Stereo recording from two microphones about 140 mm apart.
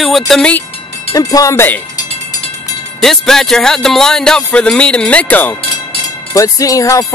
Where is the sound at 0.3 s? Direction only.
10° left (ahead or behind).